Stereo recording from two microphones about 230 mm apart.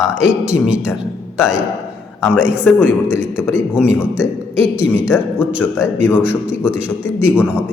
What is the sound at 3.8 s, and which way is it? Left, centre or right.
Speech, centre.